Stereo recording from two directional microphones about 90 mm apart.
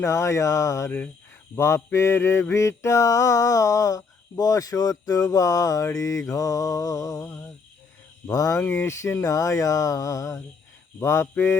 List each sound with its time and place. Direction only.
0.0 s mantra: 35° left (ahead or behind)
0.9 s speech: 20° left (ahead or behind)
1.5 s mantra: 30° left (ahead or behind)
8.3 s mantra: 40° left (ahead or behind)